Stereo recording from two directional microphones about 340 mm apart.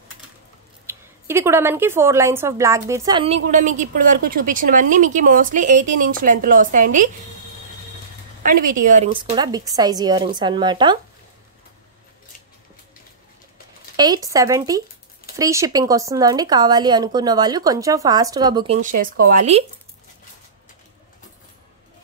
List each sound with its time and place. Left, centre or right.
0.8 s speech: centre
3.3 s speech: right
8.5 s speech: right
13.9 s speech: centre